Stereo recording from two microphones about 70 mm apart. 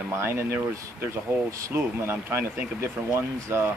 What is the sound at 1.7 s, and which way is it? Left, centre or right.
Speech, right.